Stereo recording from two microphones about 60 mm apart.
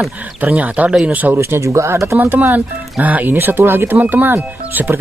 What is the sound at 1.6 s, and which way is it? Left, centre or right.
Speech, right.